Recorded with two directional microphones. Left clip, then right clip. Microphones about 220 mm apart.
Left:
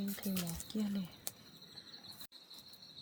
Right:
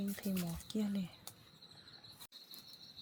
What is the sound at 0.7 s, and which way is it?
Speech, 20° right (ahead or behind).